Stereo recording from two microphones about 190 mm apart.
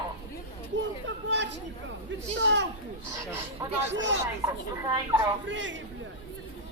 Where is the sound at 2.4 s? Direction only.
70° right (ahead or behind).